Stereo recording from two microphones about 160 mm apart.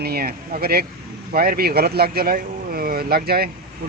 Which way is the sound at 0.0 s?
75° right (ahead or behind).